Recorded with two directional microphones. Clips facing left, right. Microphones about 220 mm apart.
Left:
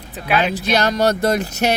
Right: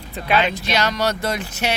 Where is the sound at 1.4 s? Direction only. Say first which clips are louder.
Left 5 dB; 40° left (ahead or behind).